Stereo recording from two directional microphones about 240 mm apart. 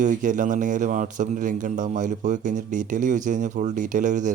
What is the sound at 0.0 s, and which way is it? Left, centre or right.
Speech, right.